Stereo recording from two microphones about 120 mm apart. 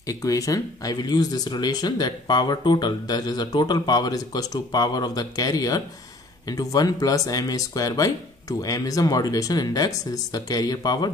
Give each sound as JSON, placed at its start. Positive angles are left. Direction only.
{"t": 0.0, "sound": "speech", "side_deg": 30}